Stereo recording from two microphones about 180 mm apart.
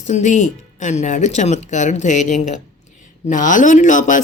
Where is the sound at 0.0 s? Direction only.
40° left (ahead or behind).